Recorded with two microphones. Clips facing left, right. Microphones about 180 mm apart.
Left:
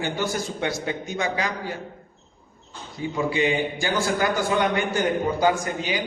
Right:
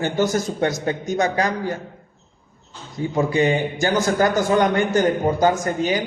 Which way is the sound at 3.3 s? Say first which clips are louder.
Right 3 dB; 45° right (ahead or behind).